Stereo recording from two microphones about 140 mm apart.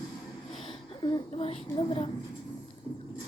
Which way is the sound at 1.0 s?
35° left (ahead or behind).